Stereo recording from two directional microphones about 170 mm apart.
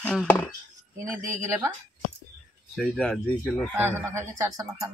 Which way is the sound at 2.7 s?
Centre (ahead or behind).